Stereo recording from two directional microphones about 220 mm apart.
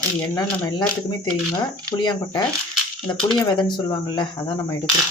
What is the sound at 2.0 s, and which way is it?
Speech, 20° left (ahead or behind).